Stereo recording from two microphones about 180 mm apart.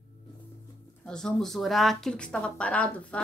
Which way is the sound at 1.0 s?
5° left (ahead or behind).